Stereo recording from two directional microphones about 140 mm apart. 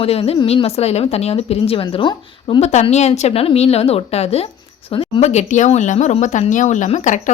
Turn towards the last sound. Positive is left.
turn(degrees=60)  # may be behind; listen again after turning